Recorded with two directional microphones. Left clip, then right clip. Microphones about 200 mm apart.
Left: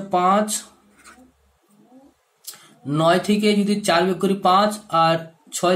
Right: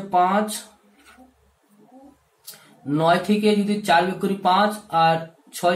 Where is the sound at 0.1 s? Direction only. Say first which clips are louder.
Left 1 dB; 40° left (ahead or behind).